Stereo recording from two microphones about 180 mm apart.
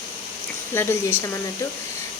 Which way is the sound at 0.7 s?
15° left (ahead or behind).